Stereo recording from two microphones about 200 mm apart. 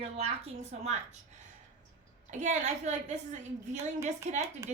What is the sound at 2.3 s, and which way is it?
A woman's voice, 35° right (ahead or behind).